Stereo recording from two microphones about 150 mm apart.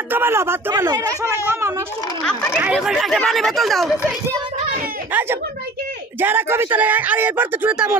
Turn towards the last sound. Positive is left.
turn(degrees=-10)  # may be behind; listen again after turning